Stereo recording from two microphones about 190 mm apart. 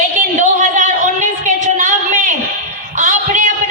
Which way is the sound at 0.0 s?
40° right (ahead or behind).